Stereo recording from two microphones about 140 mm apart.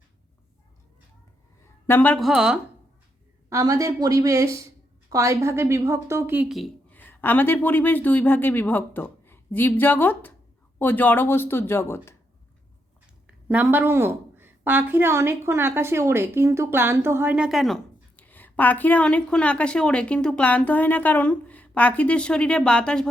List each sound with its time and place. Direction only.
1.9 s a woman's voice: 15° left (ahead or behind)
2.1 s speech: centre (ahead or behind)
3.5 s a woman's voice: 25° right (ahead or behind)
6.9 s a woman's voice: 15° left (ahead or behind)
13.2 s a woman's voice: 10° right (ahead or behind)
18.2 s a woman's voice: 10° left (ahead or behind)